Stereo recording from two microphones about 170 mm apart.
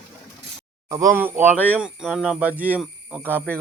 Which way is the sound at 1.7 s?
5° right (ahead or behind).